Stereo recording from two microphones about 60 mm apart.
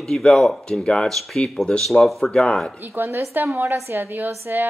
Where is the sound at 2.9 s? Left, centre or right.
Right.